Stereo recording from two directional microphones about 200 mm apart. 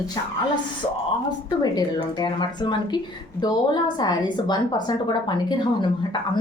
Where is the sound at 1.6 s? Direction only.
20° left (ahead or behind).